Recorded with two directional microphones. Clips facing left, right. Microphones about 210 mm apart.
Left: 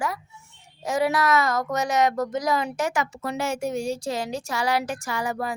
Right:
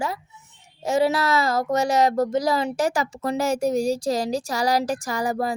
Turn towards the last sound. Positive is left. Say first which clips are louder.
# right 4 dB
turn(degrees=-35)  # may be behind; listen again after turning